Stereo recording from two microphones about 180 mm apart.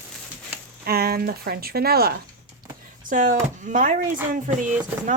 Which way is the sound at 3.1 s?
45° right (ahead or behind).